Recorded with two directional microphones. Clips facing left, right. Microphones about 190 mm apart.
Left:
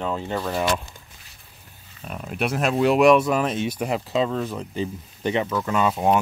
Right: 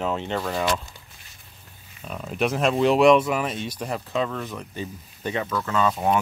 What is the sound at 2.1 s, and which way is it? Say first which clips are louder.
Speech: right 1 dB; 5° left (ahead or behind).